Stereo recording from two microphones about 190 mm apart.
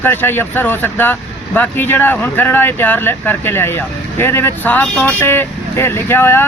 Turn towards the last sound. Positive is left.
turn(degrees=10)  # may be behind; listen again after turning